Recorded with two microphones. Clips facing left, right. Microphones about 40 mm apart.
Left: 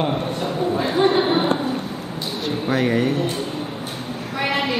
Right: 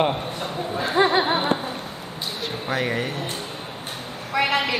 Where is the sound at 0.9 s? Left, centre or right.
Right.